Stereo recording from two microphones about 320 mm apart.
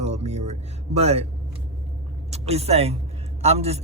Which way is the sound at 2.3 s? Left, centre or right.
Centre.